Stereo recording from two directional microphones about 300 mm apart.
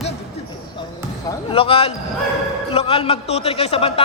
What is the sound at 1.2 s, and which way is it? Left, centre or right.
A man's voice, centre.